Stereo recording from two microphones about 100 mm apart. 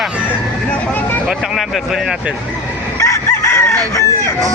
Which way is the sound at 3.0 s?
30° left (ahead or behind).